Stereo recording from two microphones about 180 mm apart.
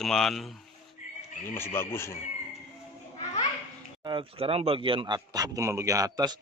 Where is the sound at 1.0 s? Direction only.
45° left (ahead or behind).